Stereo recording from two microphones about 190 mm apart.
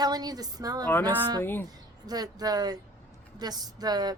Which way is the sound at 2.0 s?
20° right (ahead or behind).